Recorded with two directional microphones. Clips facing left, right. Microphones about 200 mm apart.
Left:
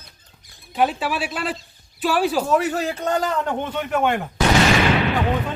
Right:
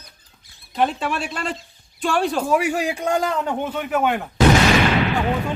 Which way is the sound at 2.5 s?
10° right (ahead or behind).